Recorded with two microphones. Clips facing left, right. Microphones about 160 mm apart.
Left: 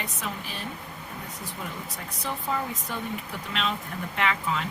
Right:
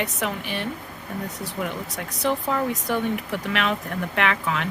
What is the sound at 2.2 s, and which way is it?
Speech, 75° right (ahead or behind).